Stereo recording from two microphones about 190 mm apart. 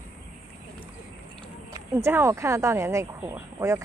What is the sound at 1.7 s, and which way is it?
Speech, 15° right (ahead or behind).